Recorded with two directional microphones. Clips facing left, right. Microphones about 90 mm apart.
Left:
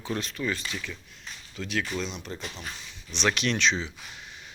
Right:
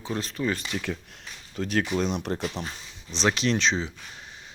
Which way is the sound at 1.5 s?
45° right (ahead or behind).